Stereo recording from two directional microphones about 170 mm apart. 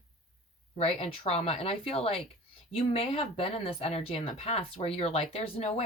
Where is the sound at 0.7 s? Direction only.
35° left (ahead or behind).